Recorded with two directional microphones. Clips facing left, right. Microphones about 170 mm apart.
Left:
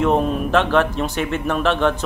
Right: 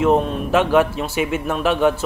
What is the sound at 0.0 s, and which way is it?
A man's voice, centre (ahead or behind).